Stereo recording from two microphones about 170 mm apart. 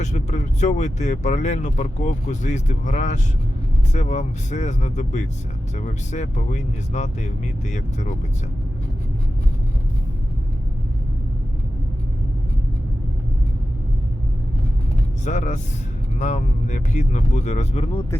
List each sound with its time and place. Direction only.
0.0 s speech: 45° left (ahead or behind)
15.2 s speech: 45° left (ahead or behind)